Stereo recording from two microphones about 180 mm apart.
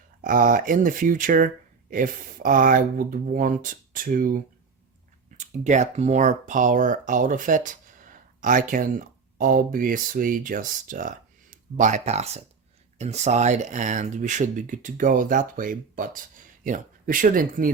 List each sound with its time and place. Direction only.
0.2 s speech: 50° right (ahead or behind)
5.4 s speech: 40° right (ahead or behind)